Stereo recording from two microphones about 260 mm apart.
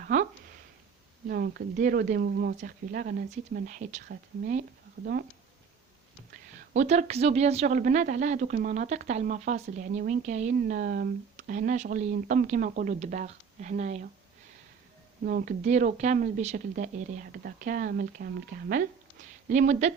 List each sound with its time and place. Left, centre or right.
0.0 s a sound: right
1.3 s speech: right
6.7 s speech: right
15.2 s speech: right